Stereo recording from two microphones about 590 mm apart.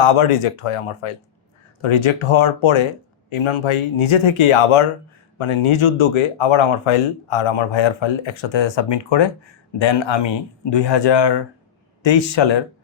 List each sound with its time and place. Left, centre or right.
0.0 s speech: left